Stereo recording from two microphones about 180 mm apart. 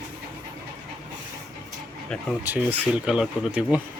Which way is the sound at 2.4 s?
10° right (ahead or behind).